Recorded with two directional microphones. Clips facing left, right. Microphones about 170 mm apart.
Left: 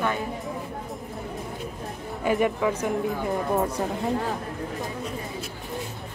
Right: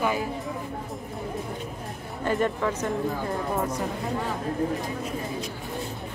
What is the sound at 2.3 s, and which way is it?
Speech, 10° left (ahead or behind).